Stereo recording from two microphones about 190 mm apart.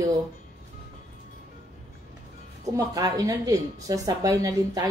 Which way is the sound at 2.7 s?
20° right (ahead or behind).